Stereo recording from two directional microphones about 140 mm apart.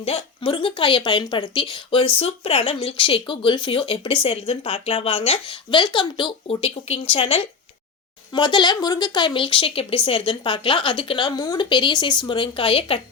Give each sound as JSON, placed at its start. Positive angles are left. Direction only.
{"t": 0.0, "sound": "a woman's voice", "side_deg": 40}